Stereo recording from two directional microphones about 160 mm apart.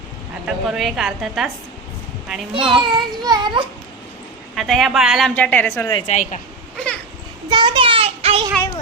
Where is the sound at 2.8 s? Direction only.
30° right (ahead or behind).